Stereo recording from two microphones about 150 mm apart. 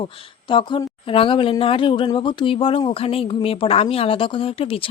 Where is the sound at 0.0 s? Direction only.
35° left (ahead or behind).